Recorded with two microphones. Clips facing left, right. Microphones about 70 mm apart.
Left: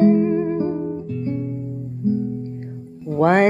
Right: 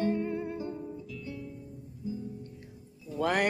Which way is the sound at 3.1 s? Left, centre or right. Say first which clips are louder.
Left 13 dB; left.